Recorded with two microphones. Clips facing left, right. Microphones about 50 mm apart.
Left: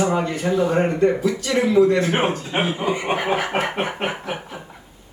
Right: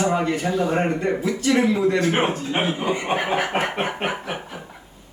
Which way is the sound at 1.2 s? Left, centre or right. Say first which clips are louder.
Right 1 dB; right.